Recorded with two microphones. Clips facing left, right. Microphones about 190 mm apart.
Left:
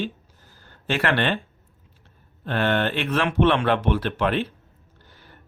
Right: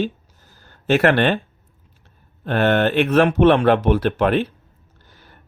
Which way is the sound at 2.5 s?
50° right (ahead or behind).